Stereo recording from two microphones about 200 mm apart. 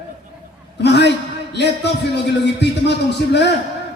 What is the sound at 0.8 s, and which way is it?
A man's voice, 60° left (ahead or behind).